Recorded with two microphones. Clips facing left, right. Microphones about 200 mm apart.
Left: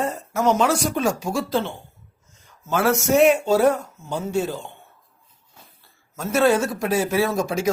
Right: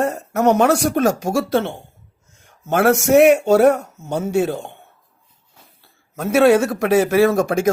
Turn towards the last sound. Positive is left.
turn(degrees=-60)  # may be behind; listen again after turning